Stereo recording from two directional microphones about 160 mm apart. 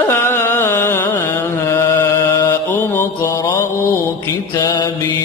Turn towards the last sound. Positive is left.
turn(degrees=20)  # may be behind; listen again after turning